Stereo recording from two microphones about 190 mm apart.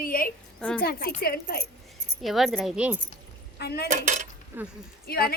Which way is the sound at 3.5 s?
60° left (ahead or behind).